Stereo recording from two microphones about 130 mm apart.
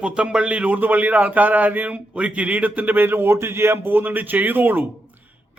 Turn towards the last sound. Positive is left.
turn(degrees=-15)  # may be behind; listen again after turning